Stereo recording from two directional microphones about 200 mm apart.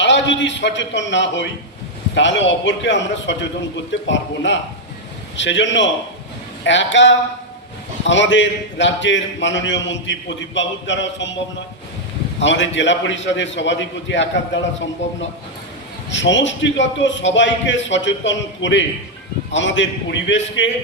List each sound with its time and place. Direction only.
0.0 s a man's voice: 65° left (ahead or behind)
12.4 s a man's voice: 65° left (ahead or behind)
16.0 s a man's voice: 65° left (ahead or behind)